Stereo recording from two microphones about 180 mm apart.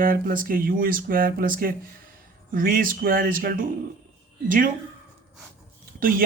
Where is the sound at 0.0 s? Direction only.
50° right (ahead or behind).